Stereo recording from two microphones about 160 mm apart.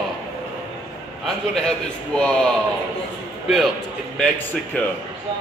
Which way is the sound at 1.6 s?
5° left (ahead or behind).